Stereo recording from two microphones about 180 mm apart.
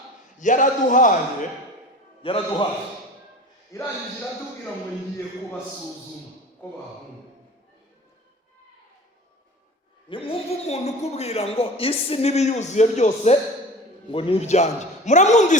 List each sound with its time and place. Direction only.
0.3 s a man's voice: 45° left (ahead or behind)
2.2 s a man's voice: 30° left (ahead or behind)
3.7 s mantra: 20° left (ahead or behind)
10.1 s a man's voice: 30° left (ahead or behind)